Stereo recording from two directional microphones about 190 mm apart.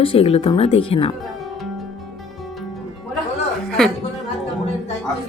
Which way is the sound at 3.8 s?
Centre (ahead or behind).